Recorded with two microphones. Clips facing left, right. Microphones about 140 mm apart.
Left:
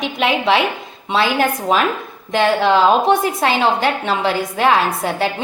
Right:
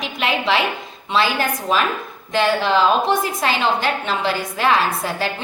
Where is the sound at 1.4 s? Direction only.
65° left (ahead or behind).